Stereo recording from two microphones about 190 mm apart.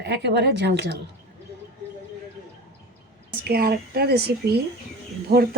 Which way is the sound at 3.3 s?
55° right (ahead or behind).